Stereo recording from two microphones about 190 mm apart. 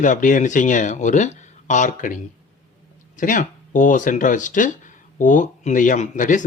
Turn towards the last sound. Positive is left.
turn(degrees=40)  # may be behind; listen again after turning